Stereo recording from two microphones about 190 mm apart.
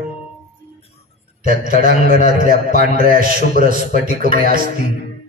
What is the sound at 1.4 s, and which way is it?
A man's voice, 45° right (ahead or behind).